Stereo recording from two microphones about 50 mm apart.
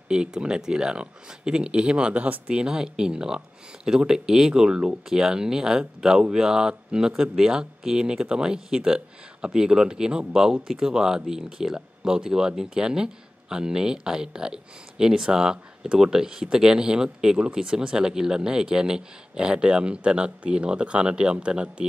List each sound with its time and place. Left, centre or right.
0.1 s speech: centre
2.2 s speech: right
2.5 s speech: centre